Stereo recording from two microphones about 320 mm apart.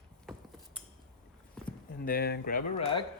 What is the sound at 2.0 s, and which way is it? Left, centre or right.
Speech, left.